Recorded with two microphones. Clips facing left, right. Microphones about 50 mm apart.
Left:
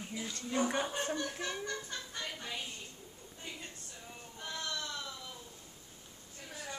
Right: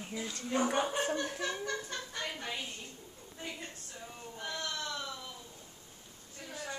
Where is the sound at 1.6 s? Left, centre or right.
Right.